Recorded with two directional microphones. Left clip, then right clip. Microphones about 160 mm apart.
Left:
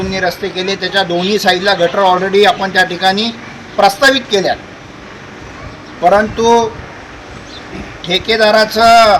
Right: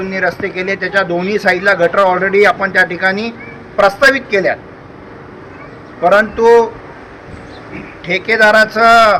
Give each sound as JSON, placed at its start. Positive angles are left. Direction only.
{"t": 0.1, "sound": "speech", "side_deg": 20}
{"t": 6.0, "sound": "speech", "side_deg": 15}
{"t": 8.0, "sound": "speech", "side_deg": 20}